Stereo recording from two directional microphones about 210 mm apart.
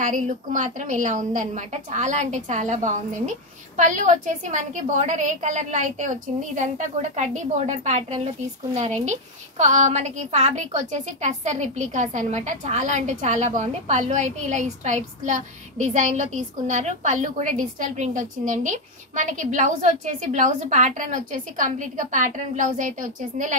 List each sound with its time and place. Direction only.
0.0 s a woman's voice: 35° right (ahead or behind)